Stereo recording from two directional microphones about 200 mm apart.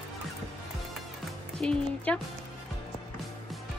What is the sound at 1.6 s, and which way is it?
Music, 5° left (ahead or behind).